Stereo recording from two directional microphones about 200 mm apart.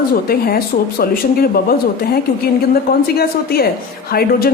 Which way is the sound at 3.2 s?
50° left (ahead or behind).